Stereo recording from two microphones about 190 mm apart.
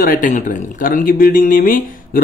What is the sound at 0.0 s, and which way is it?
Speech, 45° left (ahead or behind).